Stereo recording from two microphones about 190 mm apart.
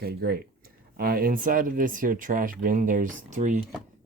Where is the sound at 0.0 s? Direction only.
55° right (ahead or behind).